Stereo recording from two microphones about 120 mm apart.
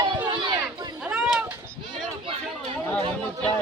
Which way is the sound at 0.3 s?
40° right (ahead or behind).